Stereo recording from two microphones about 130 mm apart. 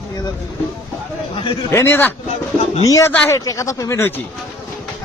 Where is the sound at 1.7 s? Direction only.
20° left (ahead or behind).